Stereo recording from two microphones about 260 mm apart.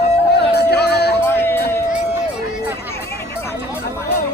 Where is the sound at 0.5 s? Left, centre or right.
Left.